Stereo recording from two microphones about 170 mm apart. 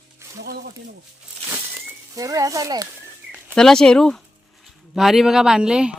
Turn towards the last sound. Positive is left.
turn(degrees=-5)  # may be behind; listen again after turning